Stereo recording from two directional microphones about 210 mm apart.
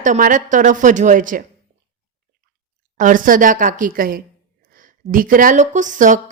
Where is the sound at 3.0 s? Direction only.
40° right (ahead or behind).